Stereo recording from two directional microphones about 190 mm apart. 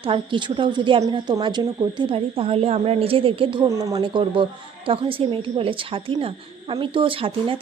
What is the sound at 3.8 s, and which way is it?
A woman's voice, 15° right (ahead or behind).